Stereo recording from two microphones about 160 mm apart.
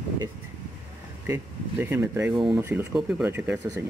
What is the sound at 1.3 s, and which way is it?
Speech, 15° right (ahead or behind).